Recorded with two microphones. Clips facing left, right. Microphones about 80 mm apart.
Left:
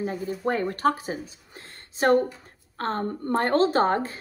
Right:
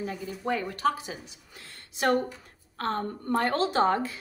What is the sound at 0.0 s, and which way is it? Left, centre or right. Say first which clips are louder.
A woman's voice: left 5 dB; left.